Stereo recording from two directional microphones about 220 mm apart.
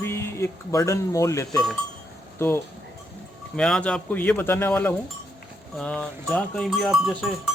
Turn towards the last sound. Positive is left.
turn(degrees=0)  # may be behind; listen again after turning